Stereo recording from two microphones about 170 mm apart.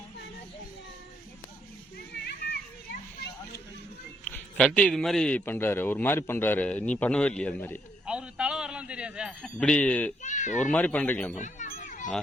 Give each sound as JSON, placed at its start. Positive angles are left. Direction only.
{"t": 2.2, "sound": "children playing", "side_deg": 70}
{"t": 4.3, "sound": "a man's voice", "side_deg": 5}
{"t": 8.0, "sound": "a sound", "side_deg": -5}
{"t": 9.6, "sound": "a man's voice", "side_deg": 5}
{"t": 10.2, "sound": "speech", "side_deg": 45}
{"t": 10.6, "sound": "a man's voice", "side_deg": 5}
{"t": 11.3, "sound": "a sound", "side_deg": 45}